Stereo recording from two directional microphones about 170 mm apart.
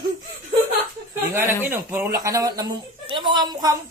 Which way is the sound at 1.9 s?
15° right (ahead or behind).